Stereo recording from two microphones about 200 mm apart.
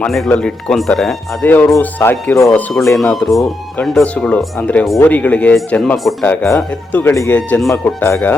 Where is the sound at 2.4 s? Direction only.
Centre (ahead or behind).